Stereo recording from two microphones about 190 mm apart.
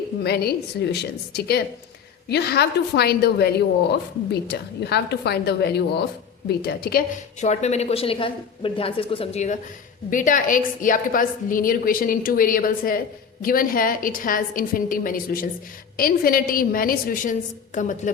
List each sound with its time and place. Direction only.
0.2 s a woman's voice: 55° left (ahead or behind)
7.4 s a woman's voice: 35° left (ahead or behind)